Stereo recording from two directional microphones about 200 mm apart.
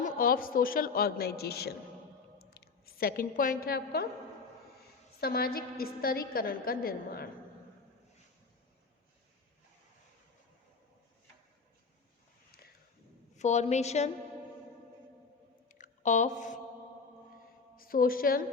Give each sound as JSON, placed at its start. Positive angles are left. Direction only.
{"t": 0.0, "sound": "a woman's voice", "side_deg": 45}
{"t": 5.2, "sound": "a woman's voice", "side_deg": 50}
{"t": 13.3, "sound": "a woman's voice", "side_deg": 35}
{"t": 15.7, "sound": "a sound", "side_deg": 40}
{"t": 17.7, "sound": "a woman's voice", "side_deg": 45}